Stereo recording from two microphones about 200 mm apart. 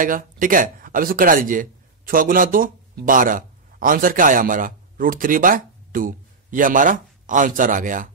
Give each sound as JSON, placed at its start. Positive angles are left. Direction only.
{"t": 0.0, "sound": "speech", "side_deg": -45}